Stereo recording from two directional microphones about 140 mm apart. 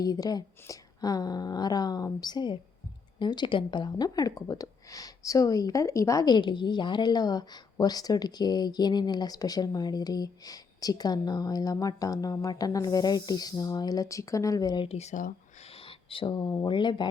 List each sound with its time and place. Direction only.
0.0 s speech: 25° left (ahead or behind)
14.8 s speech: 50° left (ahead or behind)
15.6 s a sound: 40° left (ahead or behind)
16.6 s speech: 35° left (ahead or behind)